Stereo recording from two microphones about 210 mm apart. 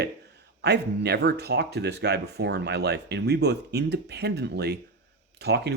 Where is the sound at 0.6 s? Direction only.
55° right (ahead or behind).